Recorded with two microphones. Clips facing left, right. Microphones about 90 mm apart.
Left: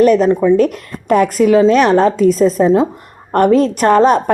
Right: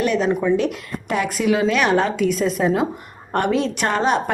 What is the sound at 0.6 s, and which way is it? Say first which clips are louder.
A woman's voice: left 8 dB; 45° left (ahead or behind).